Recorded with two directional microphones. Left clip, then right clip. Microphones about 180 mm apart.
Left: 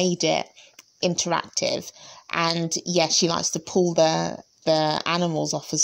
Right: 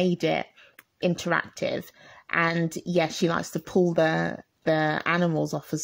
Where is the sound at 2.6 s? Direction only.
55° right (ahead or behind).